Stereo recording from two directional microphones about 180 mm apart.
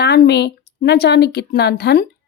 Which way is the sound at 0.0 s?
65° left (ahead or behind).